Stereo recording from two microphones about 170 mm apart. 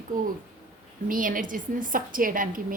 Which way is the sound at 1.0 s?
55° right (ahead or behind).